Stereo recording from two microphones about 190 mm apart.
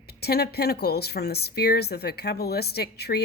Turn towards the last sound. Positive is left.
turn(degrees=55)  # may be behind; listen again after turning